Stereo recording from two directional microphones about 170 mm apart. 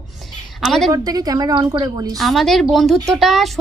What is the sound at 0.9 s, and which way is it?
A woman's voice, 20° right (ahead or behind).